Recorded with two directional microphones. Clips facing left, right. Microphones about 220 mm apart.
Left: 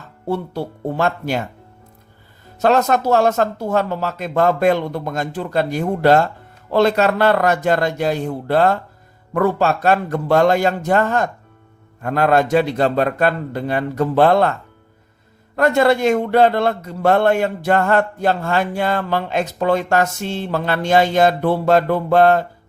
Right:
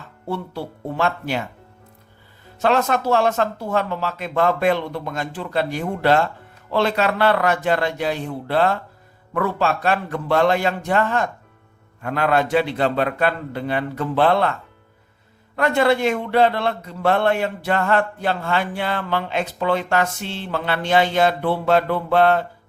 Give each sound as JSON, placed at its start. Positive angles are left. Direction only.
{"t": 0.3, "sound": "speech", "side_deg": 40}
{"t": 2.6, "sound": "a man's voice", "side_deg": 40}
{"t": 15.5, "sound": "a man's voice", "side_deg": 45}